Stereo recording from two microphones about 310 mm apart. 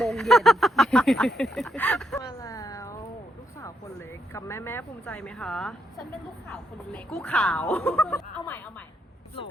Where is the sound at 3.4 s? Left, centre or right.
Centre.